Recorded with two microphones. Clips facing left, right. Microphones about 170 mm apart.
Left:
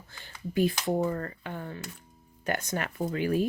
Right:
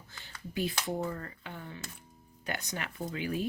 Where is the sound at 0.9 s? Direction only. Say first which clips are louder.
Left 7 dB; 65° left (ahead or behind).